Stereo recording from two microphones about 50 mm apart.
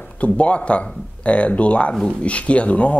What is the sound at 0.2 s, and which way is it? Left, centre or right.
Speech, left.